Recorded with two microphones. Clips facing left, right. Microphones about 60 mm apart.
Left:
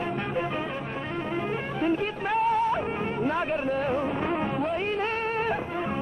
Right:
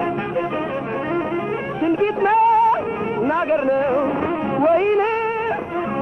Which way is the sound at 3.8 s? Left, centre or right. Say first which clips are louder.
Right 8 dB; right.